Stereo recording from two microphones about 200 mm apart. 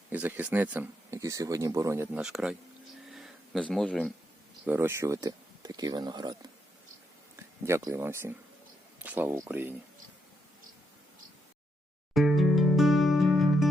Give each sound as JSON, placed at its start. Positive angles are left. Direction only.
{"t": 0.1, "sound": "speech", "side_deg": -10}
{"t": 3.1, "sound": "a sound", "side_deg": 0}
{"t": 4.6, "sound": "speech", "side_deg": -10}
{"t": 7.6, "sound": "speech", "side_deg": -15}
{"t": 12.1, "sound": "music", "side_deg": 0}